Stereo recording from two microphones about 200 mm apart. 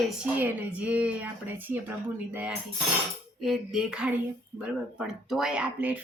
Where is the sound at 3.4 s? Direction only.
Centre (ahead or behind).